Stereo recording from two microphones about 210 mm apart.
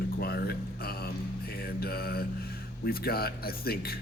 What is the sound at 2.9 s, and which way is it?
Speech, 45° left (ahead or behind).